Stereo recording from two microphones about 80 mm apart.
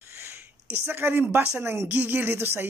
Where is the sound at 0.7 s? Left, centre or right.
Right.